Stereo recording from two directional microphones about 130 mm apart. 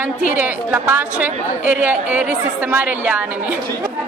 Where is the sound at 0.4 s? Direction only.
15° right (ahead or behind).